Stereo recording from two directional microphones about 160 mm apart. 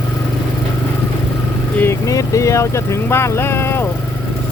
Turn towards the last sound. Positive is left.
turn(degrees=15)  # may be behind; listen again after turning